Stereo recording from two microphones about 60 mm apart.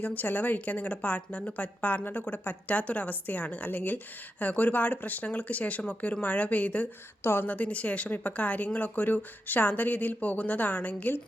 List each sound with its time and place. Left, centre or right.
0.0 s a woman's voice: left
7.2 s a woman's voice: left